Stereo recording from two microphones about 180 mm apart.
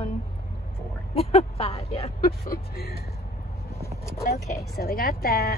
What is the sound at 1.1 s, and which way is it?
Speech, 35° left (ahead or behind).